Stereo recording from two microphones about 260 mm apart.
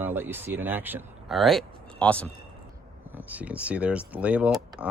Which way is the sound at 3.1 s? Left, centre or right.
Centre.